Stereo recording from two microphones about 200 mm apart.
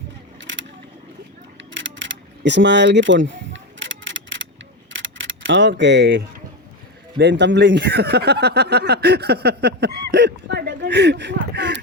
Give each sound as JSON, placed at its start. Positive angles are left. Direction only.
{"t": 0.3, "sound": "vehicle", "side_deg": -70}
{"t": 1.5, "sound": "a sound", "side_deg": -65}
{"t": 7.2, "sound": "speech", "side_deg": -60}